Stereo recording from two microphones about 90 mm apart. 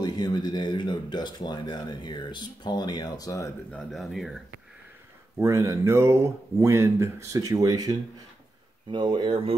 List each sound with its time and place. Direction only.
0.0 s speech: 50° left (ahead or behind)
3.9 s speech: centre (ahead or behind)
5.4 s speech: 35° right (ahead or behind)
8.9 s speech: 60° right (ahead or behind); by 9.6 s 80° right